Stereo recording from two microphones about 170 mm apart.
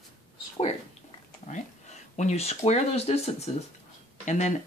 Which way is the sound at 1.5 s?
45° left (ahead or behind).